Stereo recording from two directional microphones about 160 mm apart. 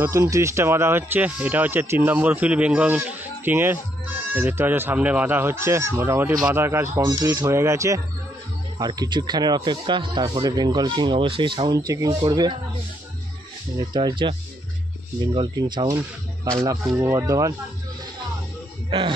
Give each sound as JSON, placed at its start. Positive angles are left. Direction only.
{"t": 0.0, "sound": "speech", "side_deg": -15}
{"t": 13.7, "sound": "speech", "side_deg": -25}
{"t": 15.3, "sound": "speech", "side_deg": -30}
{"t": 16.8, "sound": "speech", "side_deg": -10}
{"t": 18.9, "sound": "speech", "side_deg": -35}